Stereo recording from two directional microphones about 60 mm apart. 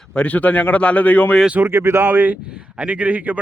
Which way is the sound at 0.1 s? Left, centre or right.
Left.